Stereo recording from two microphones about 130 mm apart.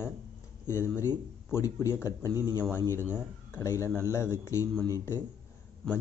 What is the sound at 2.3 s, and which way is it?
Speech, 25° right (ahead or behind).